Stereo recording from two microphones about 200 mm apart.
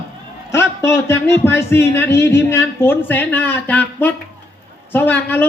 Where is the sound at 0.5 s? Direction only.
10° left (ahead or behind).